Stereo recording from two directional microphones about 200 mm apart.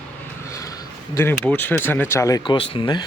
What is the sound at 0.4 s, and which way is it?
Speech, 15° left (ahead or behind).